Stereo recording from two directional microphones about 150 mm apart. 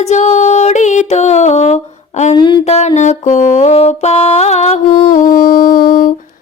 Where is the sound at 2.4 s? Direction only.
30° left (ahead or behind).